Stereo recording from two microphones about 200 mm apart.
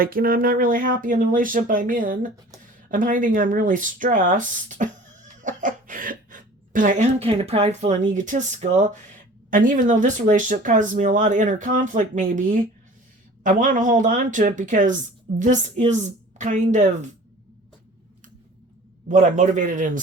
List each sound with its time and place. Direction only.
0.0 s speech: 45° right (ahead or behind)
19.0 s speech: 40° right (ahead or behind)